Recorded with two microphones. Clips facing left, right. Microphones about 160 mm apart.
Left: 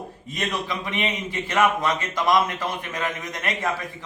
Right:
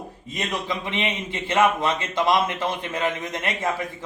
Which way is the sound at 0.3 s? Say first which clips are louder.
Even; 20° right (ahead or behind).